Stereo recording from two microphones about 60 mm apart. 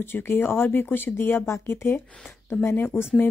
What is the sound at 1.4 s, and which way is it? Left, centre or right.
Speech, left.